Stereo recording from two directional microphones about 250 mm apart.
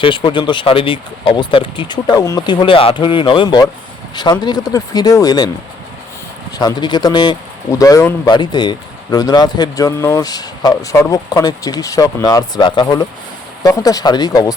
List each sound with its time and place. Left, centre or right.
0.0 s speech: centre
6.6 s speech: centre